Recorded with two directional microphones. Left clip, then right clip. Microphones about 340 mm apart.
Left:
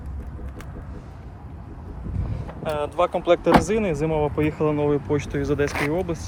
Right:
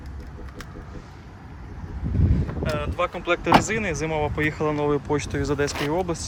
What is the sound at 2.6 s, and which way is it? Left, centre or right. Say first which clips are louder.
Speech: left 4 dB; centre.